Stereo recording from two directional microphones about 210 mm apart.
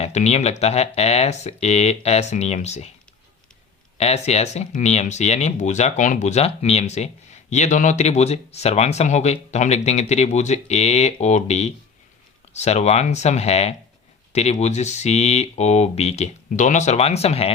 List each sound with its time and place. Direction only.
0.0 s speech: 30° left (ahead or behind)
3.9 s speech: 30° left (ahead or behind)